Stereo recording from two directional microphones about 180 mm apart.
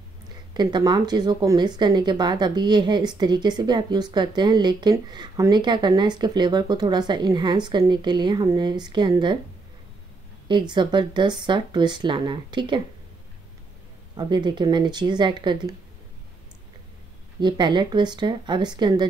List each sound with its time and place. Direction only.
0.6 s speech: 25° right (ahead or behind)
10.5 s speech: 25° right (ahead or behind)
14.1 s speech: 25° right (ahead or behind)
17.4 s speech: 25° right (ahead or behind)